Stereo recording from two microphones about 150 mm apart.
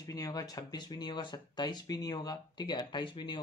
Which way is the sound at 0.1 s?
25° left (ahead or behind).